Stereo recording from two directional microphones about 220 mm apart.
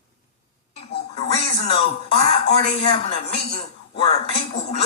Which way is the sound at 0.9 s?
50° left (ahead or behind).